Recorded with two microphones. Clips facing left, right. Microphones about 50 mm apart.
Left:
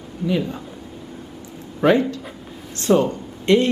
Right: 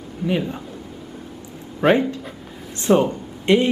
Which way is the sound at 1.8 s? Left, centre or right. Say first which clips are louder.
Even; centre.